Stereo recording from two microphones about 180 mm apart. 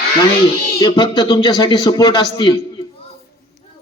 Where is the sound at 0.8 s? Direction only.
25° left (ahead or behind).